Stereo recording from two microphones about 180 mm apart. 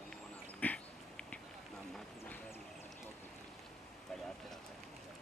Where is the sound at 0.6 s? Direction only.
10° left (ahead or behind).